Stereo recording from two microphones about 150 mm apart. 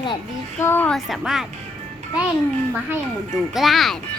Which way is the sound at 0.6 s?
15° left (ahead or behind).